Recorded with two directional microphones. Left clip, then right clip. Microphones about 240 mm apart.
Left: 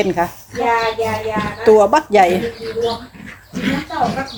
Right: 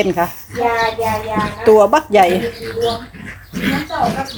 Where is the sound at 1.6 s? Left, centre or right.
Centre.